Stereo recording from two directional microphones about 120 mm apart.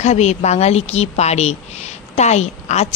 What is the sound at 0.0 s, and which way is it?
A woman's voice, 70° left (ahead or behind).